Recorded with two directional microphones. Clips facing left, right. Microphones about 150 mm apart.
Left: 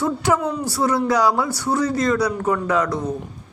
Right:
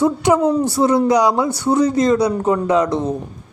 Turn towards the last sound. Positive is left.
turn(degrees=-20)  # may be behind; listen again after turning